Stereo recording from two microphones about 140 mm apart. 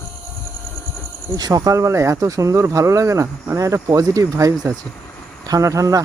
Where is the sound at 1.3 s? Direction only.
25° right (ahead or behind).